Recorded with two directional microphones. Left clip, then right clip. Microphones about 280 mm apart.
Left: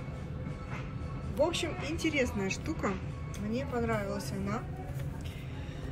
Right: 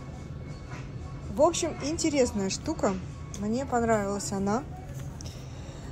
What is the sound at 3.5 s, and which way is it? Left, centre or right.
Speech, right.